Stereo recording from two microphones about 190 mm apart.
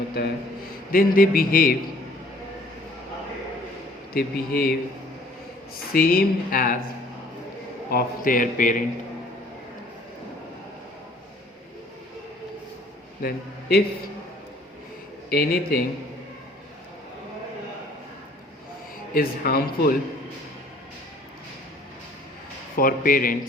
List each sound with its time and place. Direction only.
0.2 s a man's voice: 55° left (ahead or behind)
4.1 s a man's voice: 50° left (ahead or behind)
5.9 s a man's voice: 50° left (ahead or behind)
7.9 s a man's voice: 50° left (ahead or behind)
13.2 s a man's voice: 55° left (ahead or behind)
15.3 s a man's voice: 55° left (ahead or behind)
19.1 s a man's voice: 50° left (ahead or behind)
22.8 s a man's voice: 45° left (ahead or behind)